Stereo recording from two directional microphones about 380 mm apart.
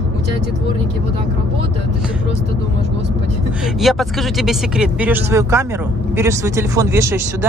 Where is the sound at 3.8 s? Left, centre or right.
Centre.